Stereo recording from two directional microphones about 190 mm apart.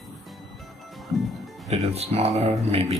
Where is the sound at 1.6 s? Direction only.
35° right (ahead or behind).